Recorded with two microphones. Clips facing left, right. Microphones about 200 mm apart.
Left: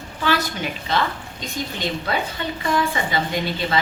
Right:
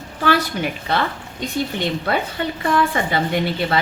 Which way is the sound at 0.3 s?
55° right (ahead or behind).